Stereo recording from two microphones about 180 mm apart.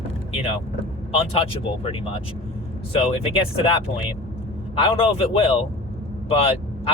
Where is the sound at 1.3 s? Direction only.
30° left (ahead or behind).